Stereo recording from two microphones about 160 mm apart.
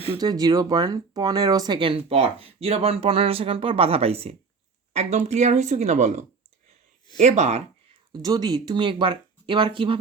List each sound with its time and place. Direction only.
0.2 s speech: 25° right (ahead or behind); by 7.9 s 45° right (ahead or behind)
8.1 s speech: 25° right (ahead or behind)